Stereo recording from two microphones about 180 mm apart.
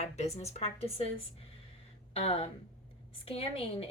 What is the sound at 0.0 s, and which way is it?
A woman's voice, 35° left (ahead or behind).